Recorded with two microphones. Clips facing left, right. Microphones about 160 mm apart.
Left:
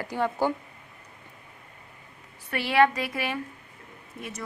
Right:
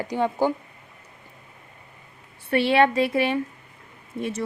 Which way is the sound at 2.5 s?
25° right (ahead or behind).